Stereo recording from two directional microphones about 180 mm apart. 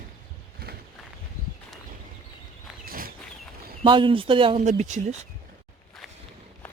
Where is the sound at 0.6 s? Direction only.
60° right (ahead or behind).